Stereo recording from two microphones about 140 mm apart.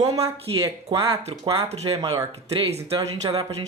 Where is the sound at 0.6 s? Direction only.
20° right (ahead or behind).